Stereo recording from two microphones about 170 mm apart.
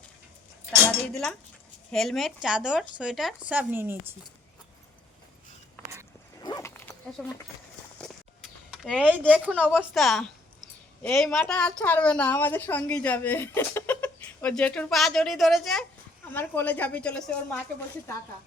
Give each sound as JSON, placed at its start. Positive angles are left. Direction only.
{"t": 0.9, "sound": "speech", "side_deg": 5}
{"t": 6.4, "sound": "dog", "side_deg": 20}
{"t": 7.2, "sound": "speech", "side_deg": 0}
{"t": 8.7, "sound": "a woman's voice", "side_deg": 0}
{"t": 16.3, "sound": "a woman's voice", "side_deg": 10}